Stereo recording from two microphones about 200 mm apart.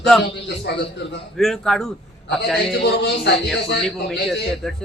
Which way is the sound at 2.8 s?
55° left (ahead or behind).